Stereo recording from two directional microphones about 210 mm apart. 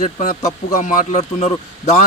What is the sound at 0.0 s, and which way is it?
Speech, 35° left (ahead or behind).